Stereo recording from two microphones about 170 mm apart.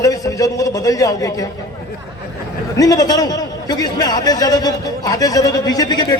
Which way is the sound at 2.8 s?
20° left (ahead or behind).